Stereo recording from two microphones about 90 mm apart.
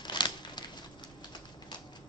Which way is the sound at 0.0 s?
55° left (ahead or behind).